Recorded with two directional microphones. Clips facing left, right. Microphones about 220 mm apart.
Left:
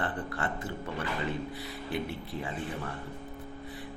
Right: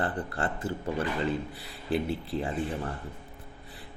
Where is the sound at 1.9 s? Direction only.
30° right (ahead or behind).